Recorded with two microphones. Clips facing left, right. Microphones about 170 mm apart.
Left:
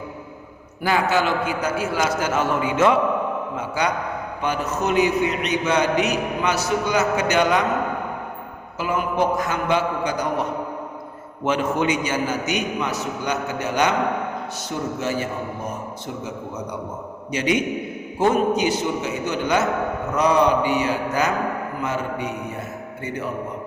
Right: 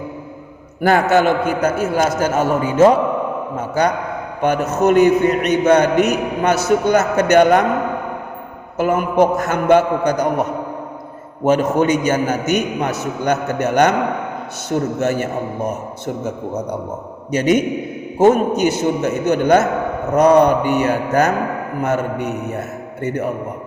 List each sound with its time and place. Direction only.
0.8 s a man's voice: 50° right (ahead or behind)
8.8 s a man's voice: 50° right (ahead or behind)
11.4 s a man's voice: 45° right (ahead or behind)
17.3 s a man's voice: 45° right (ahead or behind)